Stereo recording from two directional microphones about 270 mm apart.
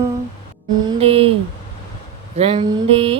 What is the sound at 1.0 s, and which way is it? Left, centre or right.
Mantra, right.